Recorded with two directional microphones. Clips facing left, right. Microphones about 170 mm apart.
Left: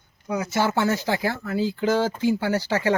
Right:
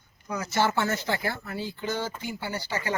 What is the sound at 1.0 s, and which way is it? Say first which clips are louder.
Speech: left 5 dB; 90° left.